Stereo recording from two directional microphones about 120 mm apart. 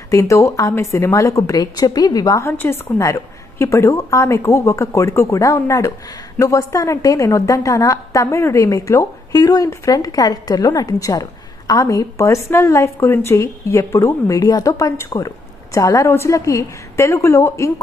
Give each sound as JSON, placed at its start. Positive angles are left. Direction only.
{"t": 0.1, "sound": "a woman's voice", "side_deg": 25}
{"t": 2.5, "sound": "a woman's voice", "side_deg": 20}